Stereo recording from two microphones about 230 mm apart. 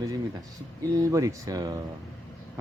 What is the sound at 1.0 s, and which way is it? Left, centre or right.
Speech, centre.